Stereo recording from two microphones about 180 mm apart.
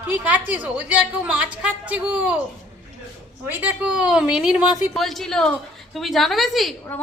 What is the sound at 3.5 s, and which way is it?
A woman's voice, 10° right (ahead or behind).